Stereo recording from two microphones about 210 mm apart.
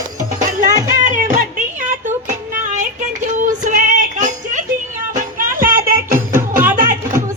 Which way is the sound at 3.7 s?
40° right (ahead or behind).